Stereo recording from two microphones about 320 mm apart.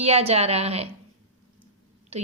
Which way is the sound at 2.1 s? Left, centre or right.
Centre.